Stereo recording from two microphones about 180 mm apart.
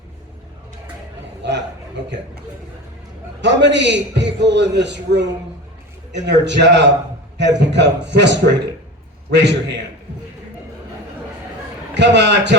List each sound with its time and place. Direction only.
1.4 s a man's voice: 75° right (ahead or behind)
3.4 s a man's voice: 80° right
11.9 s a man's voice: 75° right (ahead or behind)